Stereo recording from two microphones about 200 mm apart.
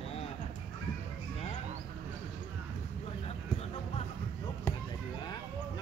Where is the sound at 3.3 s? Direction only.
30° left (ahead or behind).